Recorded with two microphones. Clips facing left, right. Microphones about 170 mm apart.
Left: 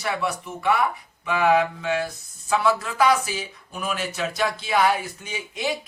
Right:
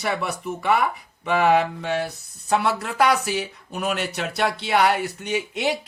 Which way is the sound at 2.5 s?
65° right (ahead or behind).